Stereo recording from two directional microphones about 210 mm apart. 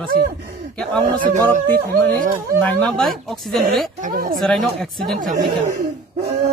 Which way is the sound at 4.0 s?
40° right (ahead or behind).